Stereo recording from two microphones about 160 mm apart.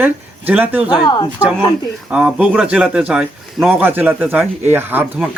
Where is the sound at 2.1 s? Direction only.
10° right (ahead or behind).